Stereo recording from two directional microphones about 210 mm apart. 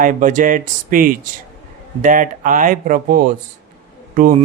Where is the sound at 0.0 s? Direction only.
40° right (ahead or behind).